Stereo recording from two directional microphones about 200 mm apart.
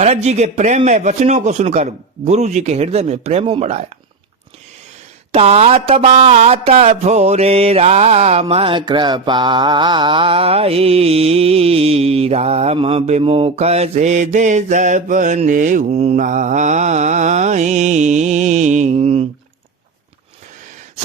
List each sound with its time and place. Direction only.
0.0 s mantra: 35° right (ahead or behind)
5.3 s mantra: 30° right (ahead or behind)